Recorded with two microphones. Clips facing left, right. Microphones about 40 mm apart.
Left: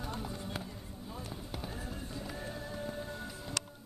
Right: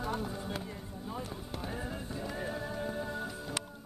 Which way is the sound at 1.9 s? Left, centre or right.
Right.